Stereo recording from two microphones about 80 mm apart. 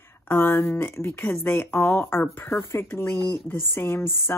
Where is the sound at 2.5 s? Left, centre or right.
Left.